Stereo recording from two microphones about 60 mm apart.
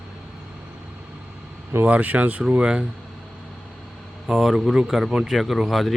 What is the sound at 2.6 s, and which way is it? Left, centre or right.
Speech, centre.